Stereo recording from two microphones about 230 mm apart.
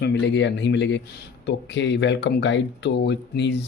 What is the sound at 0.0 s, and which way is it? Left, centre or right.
Speech, left.